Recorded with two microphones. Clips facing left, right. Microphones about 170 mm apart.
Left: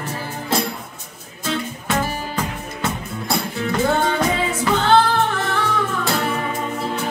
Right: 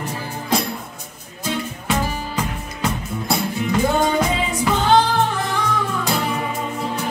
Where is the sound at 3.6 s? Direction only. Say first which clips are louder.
Even; 15° right (ahead or behind).